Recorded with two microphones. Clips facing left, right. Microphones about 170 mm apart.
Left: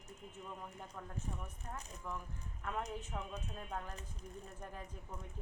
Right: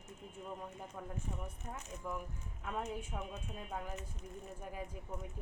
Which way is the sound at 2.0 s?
10° right (ahead or behind).